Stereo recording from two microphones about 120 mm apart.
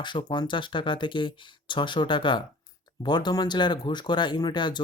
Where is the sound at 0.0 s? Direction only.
40° left (ahead or behind).